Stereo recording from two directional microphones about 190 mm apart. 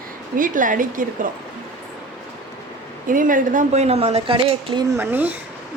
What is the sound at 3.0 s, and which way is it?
A woman's voice, 45° right (ahead or behind).